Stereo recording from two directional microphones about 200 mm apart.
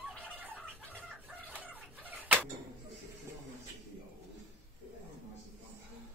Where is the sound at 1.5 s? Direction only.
10° right (ahead or behind).